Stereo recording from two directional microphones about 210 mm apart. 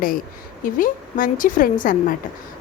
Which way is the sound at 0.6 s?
40° left (ahead or behind).